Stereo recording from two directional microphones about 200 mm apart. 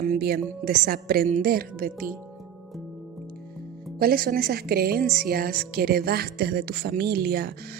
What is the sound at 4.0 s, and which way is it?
A woman's voice, 50° right (ahead or behind).